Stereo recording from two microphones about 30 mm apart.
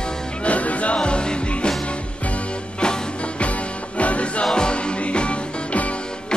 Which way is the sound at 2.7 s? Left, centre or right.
Left.